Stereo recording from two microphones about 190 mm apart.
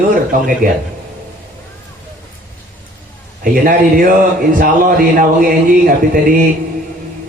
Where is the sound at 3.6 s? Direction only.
45° right (ahead or behind).